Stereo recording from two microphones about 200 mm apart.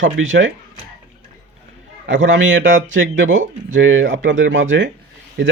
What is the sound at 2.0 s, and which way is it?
Speech, 70° right (ahead or behind).